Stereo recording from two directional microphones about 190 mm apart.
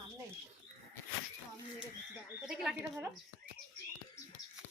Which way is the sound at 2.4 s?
5° right (ahead or behind).